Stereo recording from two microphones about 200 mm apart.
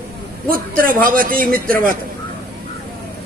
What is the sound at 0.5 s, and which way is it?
A man's voice, 45° right (ahead or behind).